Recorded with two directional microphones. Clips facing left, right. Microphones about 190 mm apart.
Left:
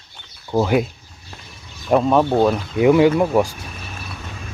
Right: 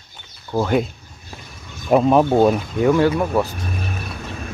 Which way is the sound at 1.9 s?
5° right (ahead or behind).